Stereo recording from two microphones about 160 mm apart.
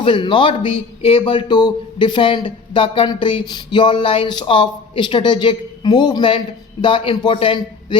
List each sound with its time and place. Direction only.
0.0 s a man's voice: 30° left (ahead or behind)